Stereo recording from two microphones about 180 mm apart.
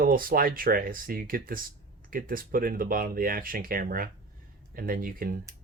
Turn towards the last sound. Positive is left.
turn(degrees=-55)  # may be behind; listen again after turning